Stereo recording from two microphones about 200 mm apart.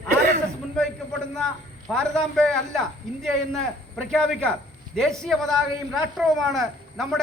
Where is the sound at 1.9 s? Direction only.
5° left (ahead or behind).